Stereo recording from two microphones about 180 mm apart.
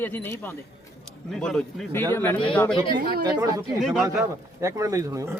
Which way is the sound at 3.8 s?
Centre (ahead or behind).